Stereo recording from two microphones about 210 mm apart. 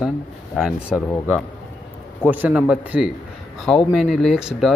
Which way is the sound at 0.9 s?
10° left (ahead or behind).